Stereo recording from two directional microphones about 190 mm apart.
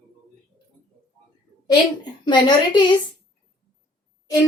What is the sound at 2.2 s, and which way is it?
Speech, 25° left (ahead or behind).